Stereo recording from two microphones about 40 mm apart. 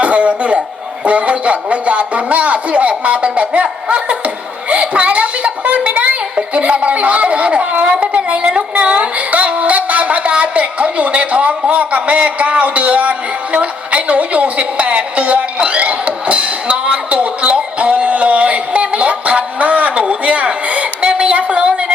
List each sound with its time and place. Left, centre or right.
0.0 s chuckle: right
1.0 s music: right
10.4 s speech: right
20.1 s a sound: right